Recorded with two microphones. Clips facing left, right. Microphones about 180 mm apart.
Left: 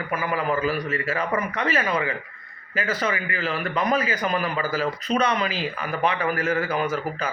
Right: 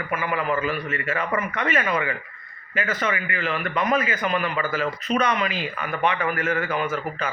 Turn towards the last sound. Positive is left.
turn(degrees=40)  # may be behind; listen again after turning